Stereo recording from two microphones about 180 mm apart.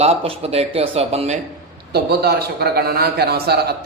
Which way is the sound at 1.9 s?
60° right (ahead or behind).